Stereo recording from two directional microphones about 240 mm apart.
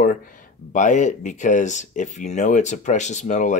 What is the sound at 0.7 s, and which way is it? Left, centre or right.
Speech, left.